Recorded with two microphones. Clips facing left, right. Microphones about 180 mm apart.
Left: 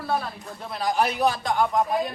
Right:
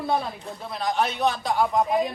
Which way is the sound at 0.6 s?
Centre (ahead or behind).